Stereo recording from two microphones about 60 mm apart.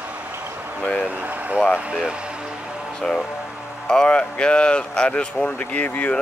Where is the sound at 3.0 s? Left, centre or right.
Centre.